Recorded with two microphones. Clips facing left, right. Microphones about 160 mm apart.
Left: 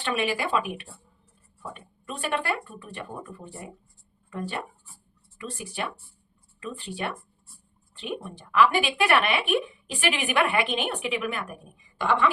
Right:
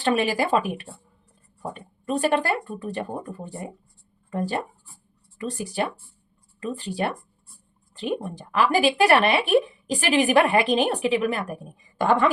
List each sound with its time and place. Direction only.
0.0 s speech: 40° right (ahead or behind)